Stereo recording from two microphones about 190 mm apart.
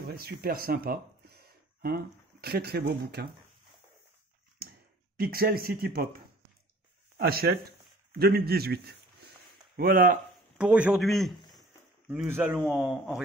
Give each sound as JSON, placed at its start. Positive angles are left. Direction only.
{"t": 0.0, "sound": "speech", "side_deg": -55}
{"t": 5.1, "sound": "a man's voice", "side_deg": -50}
{"t": 10.6, "sound": "a man's voice", "side_deg": -5}